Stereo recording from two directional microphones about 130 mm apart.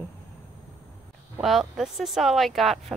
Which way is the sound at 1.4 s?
Centre (ahead or behind).